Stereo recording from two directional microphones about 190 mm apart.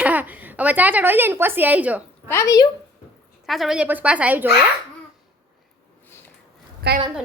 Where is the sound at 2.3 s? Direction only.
15° left (ahead or behind).